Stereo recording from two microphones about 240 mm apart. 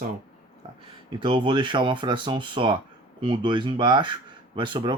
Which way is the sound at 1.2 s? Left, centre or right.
Centre.